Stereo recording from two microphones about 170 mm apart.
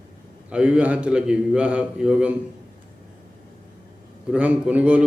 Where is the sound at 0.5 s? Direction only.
5° right (ahead or behind).